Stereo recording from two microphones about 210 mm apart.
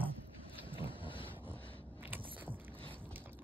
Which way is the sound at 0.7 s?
25° left (ahead or behind).